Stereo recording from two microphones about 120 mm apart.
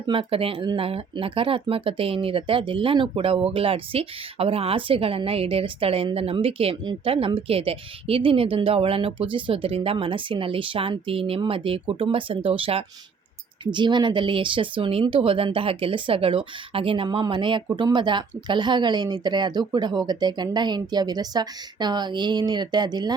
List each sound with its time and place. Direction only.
0.0 s speech: 45° right (ahead or behind)